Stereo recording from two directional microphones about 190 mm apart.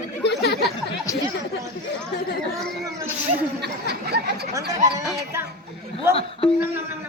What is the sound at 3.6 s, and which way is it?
Chatter, 60° right (ahead or behind).